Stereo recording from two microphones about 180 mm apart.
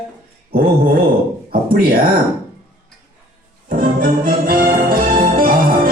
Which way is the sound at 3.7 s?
50° right (ahead or behind).